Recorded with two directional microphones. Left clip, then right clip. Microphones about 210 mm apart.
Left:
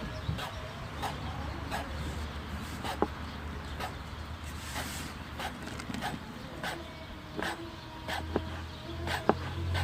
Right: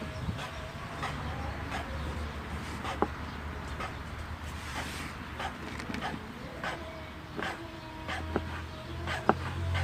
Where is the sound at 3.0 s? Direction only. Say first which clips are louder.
Right 1 dB; 15° right (ahead or behind).